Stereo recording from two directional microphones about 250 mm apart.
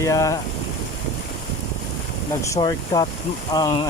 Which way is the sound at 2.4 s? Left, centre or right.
Centre.